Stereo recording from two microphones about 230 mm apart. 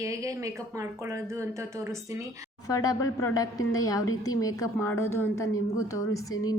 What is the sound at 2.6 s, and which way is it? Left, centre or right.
A woman's voice, centre.